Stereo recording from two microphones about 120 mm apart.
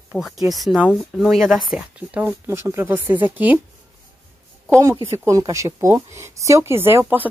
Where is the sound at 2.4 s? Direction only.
25° right (ahead or behind).